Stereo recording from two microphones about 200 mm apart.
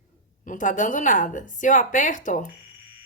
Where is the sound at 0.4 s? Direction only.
40° left (ahead or behind).